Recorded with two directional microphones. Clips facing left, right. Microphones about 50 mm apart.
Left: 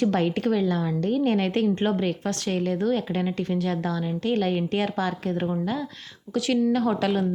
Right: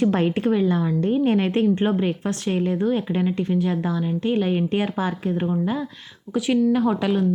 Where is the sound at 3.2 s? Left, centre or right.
Centre.